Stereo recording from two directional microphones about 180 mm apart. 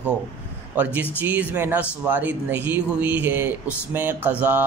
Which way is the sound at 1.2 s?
10° right (ahead or behind).